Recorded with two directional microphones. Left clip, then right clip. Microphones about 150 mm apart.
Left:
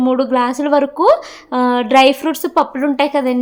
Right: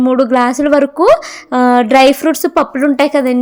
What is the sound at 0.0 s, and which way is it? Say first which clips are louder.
A woman's voice: right 4 dB; 25° right (ahead or behind).